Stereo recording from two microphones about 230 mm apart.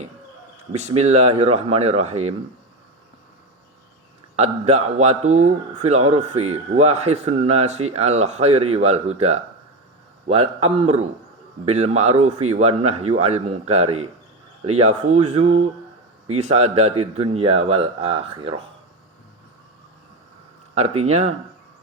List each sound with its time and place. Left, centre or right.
0.7 s a man's voice: right
4.4 s a man's voice: right
20.7 s a man's voice: right